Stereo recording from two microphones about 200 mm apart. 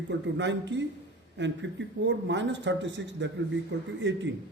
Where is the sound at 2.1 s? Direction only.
65° right (ahead or behind).